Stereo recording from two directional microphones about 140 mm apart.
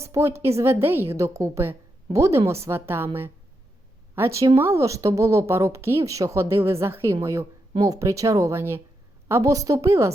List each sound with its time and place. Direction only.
0.0 s a woman's voice: 20° right (ahead or behind)
4.1 s speech: 20° right (ahead or behind)